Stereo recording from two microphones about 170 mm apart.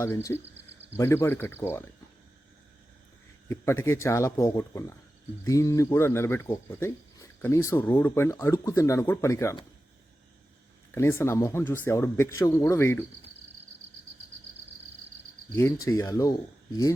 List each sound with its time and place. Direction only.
0.0 s speech: 15° left (ahead or behind)
3.5 s speech: 15° left (ahead or behind)
10.9 s speech: 15° left (ahead or behind)
15.5 s speech: 15° left (ahead or behind)